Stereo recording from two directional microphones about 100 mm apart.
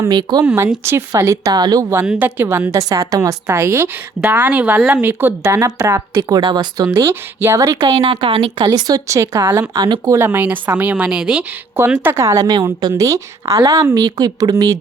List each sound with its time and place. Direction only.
0.1 s speech: 45° right (ahead or behind)
0.4 s speech: 25° right (ahead or behind); by 1.9 s 40° right (ahead or behind)
2.0 s a woman's voice: 15° right (ahead or behind)
2.7 s a woman's voice: 35° right (ahead or behind)
5.4 s speech: 30° right (ahead or behind)
7.8 s speech: 45° right (ahead or behind)
8.1 s a woman's voice: 60° right (ahead or behind)
8.7 s speech: 35° right (ahead or behind)
9.7 s speech: 40° right (ahead or behind)
10.2 s a woman's voice: 20° right (ahead or behind)
12.0 s speech: 30° right (ahead or behind)